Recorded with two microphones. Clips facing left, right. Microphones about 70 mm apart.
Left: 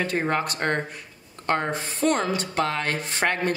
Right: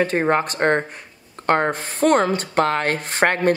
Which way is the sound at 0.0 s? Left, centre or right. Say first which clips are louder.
Right 6 dB; right.